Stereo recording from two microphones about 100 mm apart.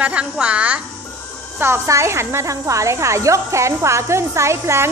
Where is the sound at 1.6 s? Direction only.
25° right (ahead or behind).